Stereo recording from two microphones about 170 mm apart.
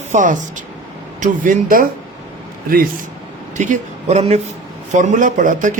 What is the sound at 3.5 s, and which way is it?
A man's voice, 45° right (ahead or behind).